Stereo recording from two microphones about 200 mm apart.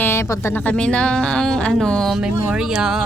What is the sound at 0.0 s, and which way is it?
Speech, 10° left (ahead or behind).